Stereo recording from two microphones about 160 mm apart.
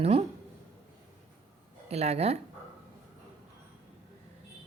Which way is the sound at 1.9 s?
40° right (ahead or behind).